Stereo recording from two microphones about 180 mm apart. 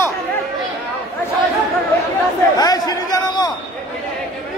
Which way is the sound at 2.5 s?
20° left (ahead or behind).